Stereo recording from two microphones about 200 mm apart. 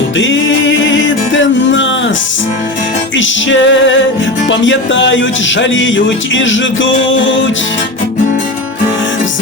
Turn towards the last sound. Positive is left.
turn(degrees=70)  # may be behind; listen again after turning